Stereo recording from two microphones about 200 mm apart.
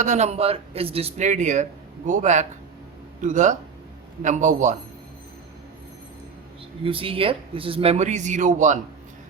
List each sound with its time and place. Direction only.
0.0 s speech: 35° right (ahead or behind)
6.8 s speech: 25° right (ahead or behind)